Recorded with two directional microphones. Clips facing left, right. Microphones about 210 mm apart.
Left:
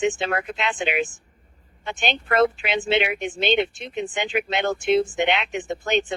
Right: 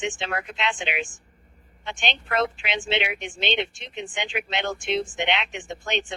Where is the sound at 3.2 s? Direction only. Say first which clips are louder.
Left 6 dB; 45° left (ahead or behind).